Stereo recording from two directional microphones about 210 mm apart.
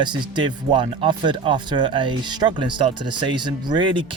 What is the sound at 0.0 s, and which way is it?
Speech, 20° right (ahead or behind).